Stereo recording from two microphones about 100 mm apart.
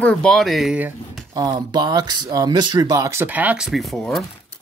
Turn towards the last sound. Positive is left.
turn(degrees=0)  # may be behind; listen again after turning